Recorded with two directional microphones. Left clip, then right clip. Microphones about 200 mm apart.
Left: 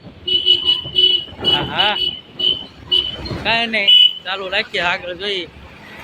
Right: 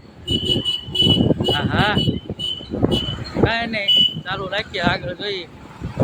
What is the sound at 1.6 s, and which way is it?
Speech, 10° right (ahead or behind).